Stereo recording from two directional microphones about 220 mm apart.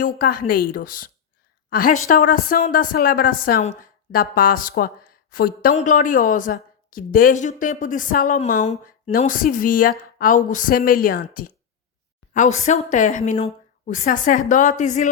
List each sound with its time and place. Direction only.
0.0 s speech: 40° left (ahead or behind)